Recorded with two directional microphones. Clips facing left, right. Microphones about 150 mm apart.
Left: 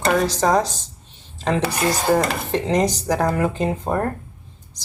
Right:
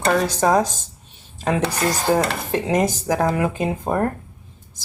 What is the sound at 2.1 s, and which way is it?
Speech, 10° right (ahead or behind).